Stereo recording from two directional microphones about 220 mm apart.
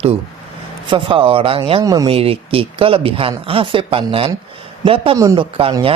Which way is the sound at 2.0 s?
25° right (ahead or behind).